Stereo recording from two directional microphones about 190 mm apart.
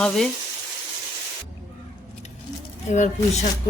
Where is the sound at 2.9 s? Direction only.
40° left (ahead or behind).